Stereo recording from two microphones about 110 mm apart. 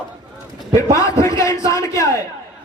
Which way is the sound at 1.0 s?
30° left (ahead or behind).